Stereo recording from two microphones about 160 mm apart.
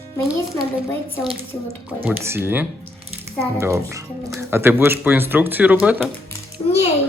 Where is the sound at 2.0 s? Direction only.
15° right (ahead or behind).